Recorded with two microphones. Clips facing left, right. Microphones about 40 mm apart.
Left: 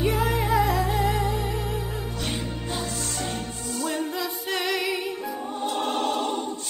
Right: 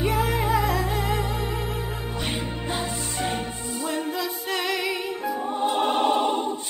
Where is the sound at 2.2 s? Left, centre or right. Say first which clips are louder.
Right 3 dB; right.